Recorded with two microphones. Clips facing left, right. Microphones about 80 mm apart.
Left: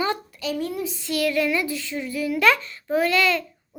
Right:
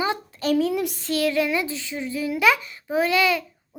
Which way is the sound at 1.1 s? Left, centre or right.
Right.